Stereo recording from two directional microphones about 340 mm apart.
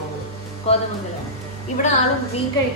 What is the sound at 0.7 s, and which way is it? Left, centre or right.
Speech, centre.